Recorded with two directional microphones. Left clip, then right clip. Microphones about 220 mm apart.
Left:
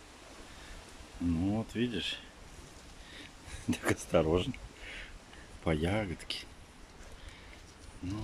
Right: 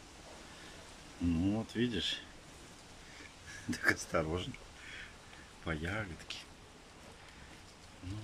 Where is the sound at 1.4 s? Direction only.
Centre (ahead or behind).